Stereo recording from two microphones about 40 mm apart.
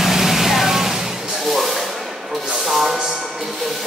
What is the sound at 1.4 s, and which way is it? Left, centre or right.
Music, centre.